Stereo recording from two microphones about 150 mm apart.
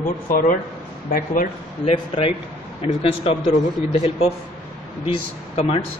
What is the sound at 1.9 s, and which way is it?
A man's voice, 35° left (ahead or behind).